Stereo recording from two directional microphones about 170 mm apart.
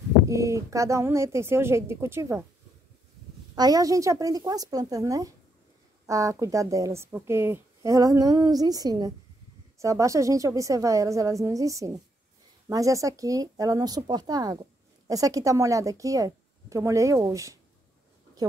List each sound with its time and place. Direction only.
0.3 s a woman's voice: 20° right (ahead or behind)
3.5 s speech: 20° right (ahead or behind)